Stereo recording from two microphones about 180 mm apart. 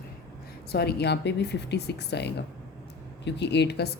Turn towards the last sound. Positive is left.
turn(degrees=65)  # may be behind; listen again after turning